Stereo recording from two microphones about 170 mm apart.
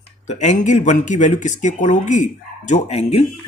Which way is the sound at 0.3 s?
45° left (ahead or behind).